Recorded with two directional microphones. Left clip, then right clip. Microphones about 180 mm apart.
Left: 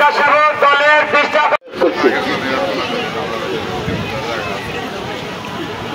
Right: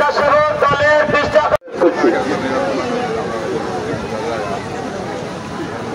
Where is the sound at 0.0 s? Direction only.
60° right (ahead or behind).